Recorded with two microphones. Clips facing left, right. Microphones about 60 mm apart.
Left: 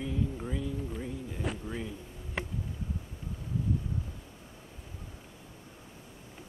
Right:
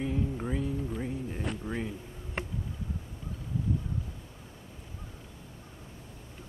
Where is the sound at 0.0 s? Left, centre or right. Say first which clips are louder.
Right 2 dB; right.